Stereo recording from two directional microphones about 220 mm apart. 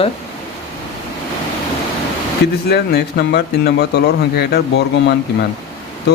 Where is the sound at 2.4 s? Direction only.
50° left (ahead or behind).